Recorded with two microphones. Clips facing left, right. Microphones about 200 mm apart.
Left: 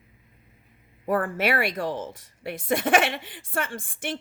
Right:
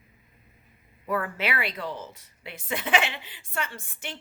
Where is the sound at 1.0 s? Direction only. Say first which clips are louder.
Left 5 dB; 45° left (ahead or behind).